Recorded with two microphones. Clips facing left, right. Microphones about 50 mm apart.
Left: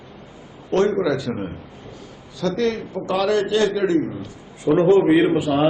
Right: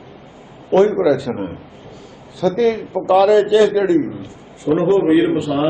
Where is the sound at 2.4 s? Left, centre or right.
Centre.